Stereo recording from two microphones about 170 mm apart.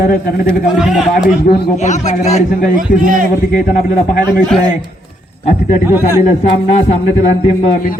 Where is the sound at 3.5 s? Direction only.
55° left (ahead or behind).